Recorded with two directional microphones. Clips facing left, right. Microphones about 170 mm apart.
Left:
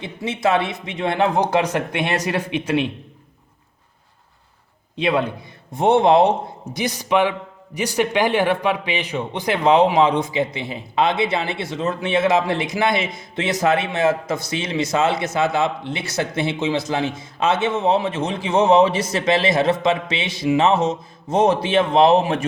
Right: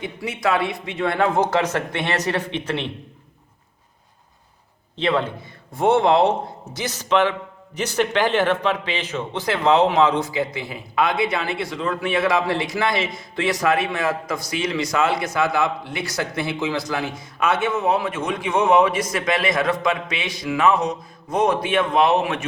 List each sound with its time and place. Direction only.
0.0 s a man's voice: 25° left (ahead or behind)
4.9 s a man's voice: 10° left (ahead or behind); by 22.4 s 30° left (ahead or behind)